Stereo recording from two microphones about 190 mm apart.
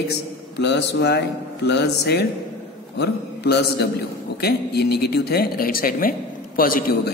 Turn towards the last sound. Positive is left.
turn(degrees=50)  # may be behind; listen again after turning